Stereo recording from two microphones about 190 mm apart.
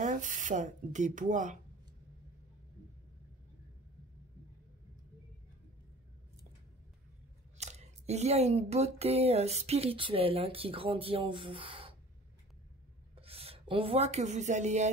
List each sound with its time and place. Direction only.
0.0 s speech: 40° right (ahead or behind)
7.5 s speech: 35° right (ahead or behind)
13.1 s speech: 30° right (ahead or behind)